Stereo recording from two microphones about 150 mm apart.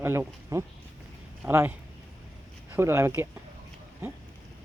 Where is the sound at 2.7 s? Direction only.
20° right (ahead or behind).